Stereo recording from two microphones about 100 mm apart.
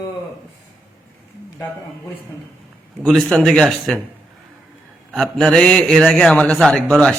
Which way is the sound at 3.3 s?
5° left (ahead or behind).